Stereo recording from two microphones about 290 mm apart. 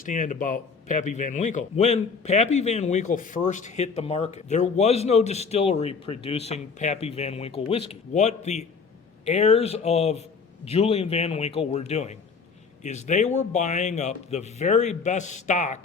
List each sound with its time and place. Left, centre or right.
0.0 s a man's voice: left